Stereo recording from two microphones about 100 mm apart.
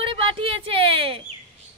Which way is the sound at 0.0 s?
60° right (ahead or behind).